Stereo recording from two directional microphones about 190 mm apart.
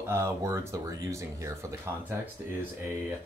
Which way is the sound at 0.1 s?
15° right (ahead or behind).